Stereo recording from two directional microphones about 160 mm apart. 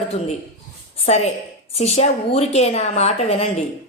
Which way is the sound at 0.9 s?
40° left (ahead or behind).